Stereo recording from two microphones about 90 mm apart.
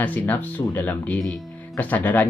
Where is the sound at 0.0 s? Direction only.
20° left (ahead or behind).